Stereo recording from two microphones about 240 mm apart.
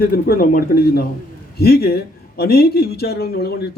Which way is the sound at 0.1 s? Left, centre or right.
Left.